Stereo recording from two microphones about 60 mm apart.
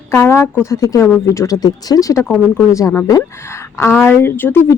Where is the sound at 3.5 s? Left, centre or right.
Left.